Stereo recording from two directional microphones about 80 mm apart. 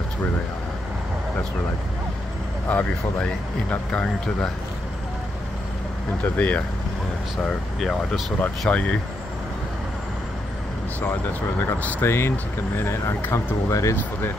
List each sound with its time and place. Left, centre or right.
2.7 s speech: left
6.2 s speech: centre
7.4 s speech: centre
11.6 s speech: left